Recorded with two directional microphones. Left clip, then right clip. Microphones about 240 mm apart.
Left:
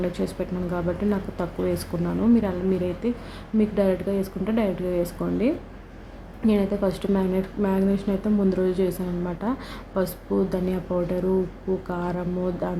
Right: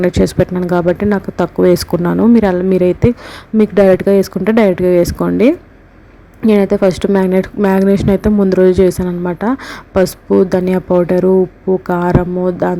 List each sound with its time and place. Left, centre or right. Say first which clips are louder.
0.0 s speech: right 15 dB; right